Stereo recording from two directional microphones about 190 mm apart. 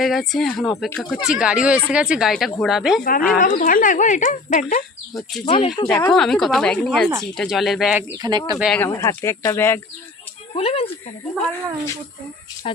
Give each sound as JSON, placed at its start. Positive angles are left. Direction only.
{"t": 0.0, "sound": "speech", "side_deg": 0}
{"t": 3.0, "sound": "speech", "side_deg": 50}
{"t": 5.5, "sound": "speech", "side_deg": 25}
{"t": 6.1, "sound": "speech", "side_deg": 5}
{"t": 8.2, "sound": "speech", "side_deg": -20}
{"t": 8.5, "sound": "speech", "side_deg": -5}
{"t": 8.8, "sound": "speech", "side_deg": 10}
{"t": 10.5, "sound": "speech", "side_deg": 30}
{"t": 12.7, "sound": "speech", "side_deg": 30}